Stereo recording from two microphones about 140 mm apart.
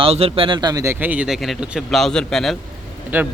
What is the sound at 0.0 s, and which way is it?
Speech, 45° right (ahead or behind).